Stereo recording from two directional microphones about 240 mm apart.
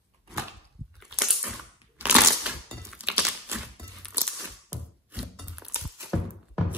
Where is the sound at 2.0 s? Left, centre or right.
Centre.